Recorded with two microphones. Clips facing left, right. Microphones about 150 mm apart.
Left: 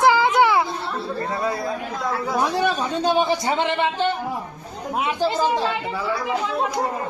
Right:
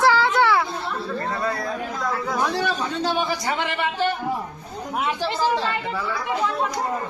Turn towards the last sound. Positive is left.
turn(degrees=15)  # may be behind; listen again after turning